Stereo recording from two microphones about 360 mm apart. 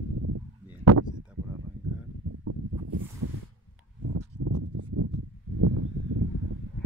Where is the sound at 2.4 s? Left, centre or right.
Right.